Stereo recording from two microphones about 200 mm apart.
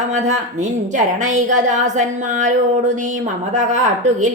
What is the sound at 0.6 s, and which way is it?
A woman's voice, 35° right (ahead or behind).